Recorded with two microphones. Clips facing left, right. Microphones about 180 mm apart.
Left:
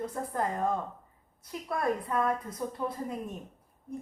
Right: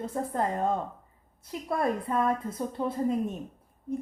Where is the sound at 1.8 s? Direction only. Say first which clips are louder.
Right 2 dB; 25° right (ahead or behind).